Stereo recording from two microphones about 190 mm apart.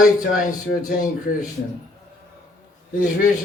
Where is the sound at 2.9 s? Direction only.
45° left (ahead or behind).